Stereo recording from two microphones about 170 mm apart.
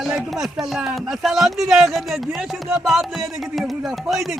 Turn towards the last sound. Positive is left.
turn(degrees=0)  # may be behind; listen again after turning